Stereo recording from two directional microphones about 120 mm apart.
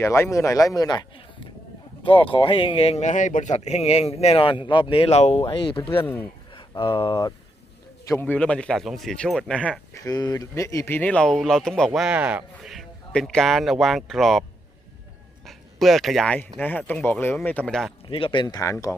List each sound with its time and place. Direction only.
0.0 s a man's voice: 25° left (ahead or behind)
2.0 s a man's voice: 50° left (ahead or behind)
5.5 s speech: 45° left (ahead or behind)
6.5 s a sound: 45° left (ahead or behind)
6.9 s speech: 40° left (ahead or behind)
8.0 s speech: 20° left (ahead or behind)
9.9 s speech: 30° left (ahead or behind); by 11.9 s 5° left (ahead or behind)
11.9 s speech: 5° right (ahead or behind)
15.4 s speech: centre (ahead or behind)
18.0 s speech: 45° left (ahead or behind); by 18.9 s 25° left (ahead or behind)